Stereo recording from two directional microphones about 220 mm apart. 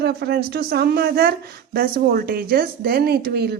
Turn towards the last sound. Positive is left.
turn(degrees=-45)  # may be behind; listen again after turning